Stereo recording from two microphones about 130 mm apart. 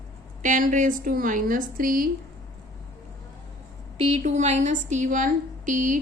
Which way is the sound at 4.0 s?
55° right (ahead or behind).